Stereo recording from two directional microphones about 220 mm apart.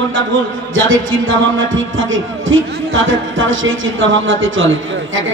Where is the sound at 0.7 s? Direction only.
60° right (ahead or behind).